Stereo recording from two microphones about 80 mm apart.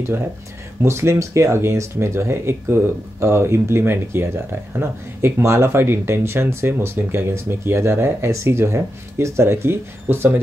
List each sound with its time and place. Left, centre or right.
0.8 s speech: right